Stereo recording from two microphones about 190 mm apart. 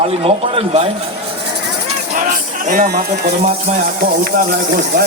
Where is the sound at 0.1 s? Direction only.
30° right (ahead or behind).